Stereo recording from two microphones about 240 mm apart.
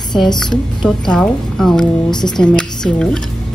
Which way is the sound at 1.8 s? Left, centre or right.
Centre.